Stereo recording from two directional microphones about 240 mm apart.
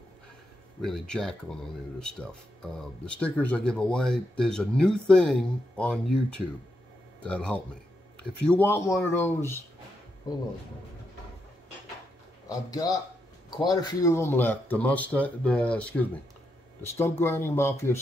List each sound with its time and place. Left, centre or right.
0.8 s speech: centre
12.4 s speech: centre